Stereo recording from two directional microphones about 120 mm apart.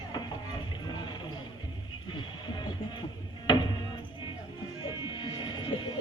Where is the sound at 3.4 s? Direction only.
40° left (ahead or behind).